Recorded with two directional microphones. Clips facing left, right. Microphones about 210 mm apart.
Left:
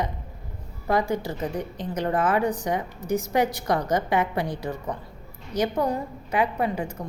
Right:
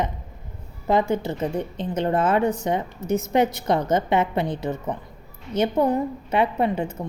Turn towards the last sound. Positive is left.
turn(degrees=-25)  # may be behind; listen again after turning